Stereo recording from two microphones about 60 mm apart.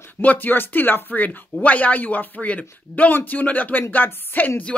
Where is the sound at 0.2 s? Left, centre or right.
Left.